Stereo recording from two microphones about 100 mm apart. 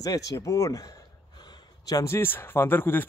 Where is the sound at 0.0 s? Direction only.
35° left (ahead or behind).